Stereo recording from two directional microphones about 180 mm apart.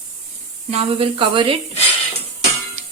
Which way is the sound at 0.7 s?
30° right (ahead or behind).